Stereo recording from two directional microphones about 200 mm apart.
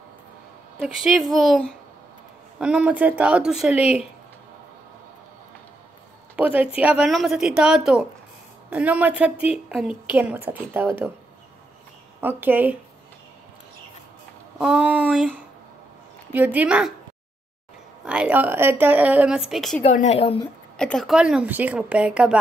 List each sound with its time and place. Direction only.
0.7 s a woman's voice: centre (ahead or behind)
3.7 s a woman's voice: 30° left (ahead or behind)
6.3 s a woman's voice: 5° right (ahead or behind)
12.2 s a woman's voice: 10° right (ahead or behind)
14.6 s a woman's voice: 5° right (ahead or behind)
18.0 s a woman's voice: 5° right (ahead or behind)
19.8 s a woman's voice: 35° left (ahead or behind)
20.7 s a woman's voice: 5° left (ahead or behind)